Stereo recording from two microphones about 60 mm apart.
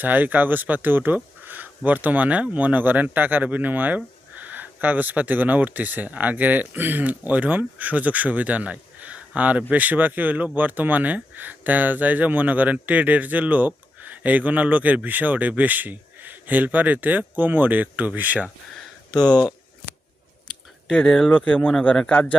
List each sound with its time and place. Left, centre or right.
0.0 s speech: right
21.1 s speech: centre
21.3 s speech: left